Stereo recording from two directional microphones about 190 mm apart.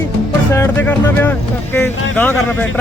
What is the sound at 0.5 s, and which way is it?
Speech, 10° left (ahead or behind).